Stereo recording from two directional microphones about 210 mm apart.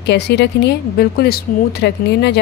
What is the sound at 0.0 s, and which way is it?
A woman's voice, 55° left (ahead or behind).